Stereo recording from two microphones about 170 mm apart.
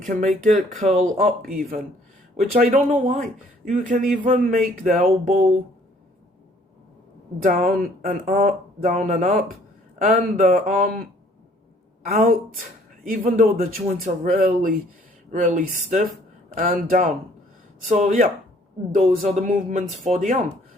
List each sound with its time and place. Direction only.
0.0 s speech: 50° right (ahead or behind)
2.3 s speech: 55° right (ahead or behind)
7.4 s speech: 55° right (ahead or behind)
12.0 s speech: 55° right (ahead or behind)